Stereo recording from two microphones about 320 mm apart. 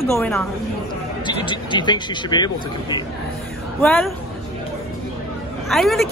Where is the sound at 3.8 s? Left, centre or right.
Centre.